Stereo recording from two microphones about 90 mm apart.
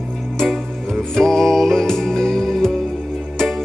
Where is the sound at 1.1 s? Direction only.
5° left (ahead or behind).